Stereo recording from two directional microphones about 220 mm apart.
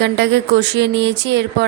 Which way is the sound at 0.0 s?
50° right (ahead or behind).